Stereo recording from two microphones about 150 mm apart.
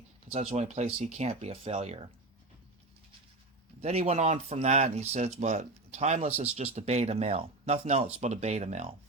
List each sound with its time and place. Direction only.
0.3 s speech: 45° right (ahead or behind)
3.8 s speech: 45° right (ahead or behind)